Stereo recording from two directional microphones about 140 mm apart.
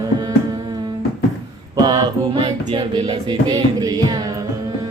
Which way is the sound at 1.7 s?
30° right (ahead or behind).